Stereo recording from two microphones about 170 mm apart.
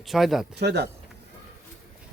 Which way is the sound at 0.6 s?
75° right (ahead or behind).